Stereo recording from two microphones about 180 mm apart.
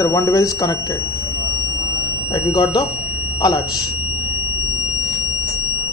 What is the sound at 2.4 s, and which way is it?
Speech, 20° left (ahead or behind).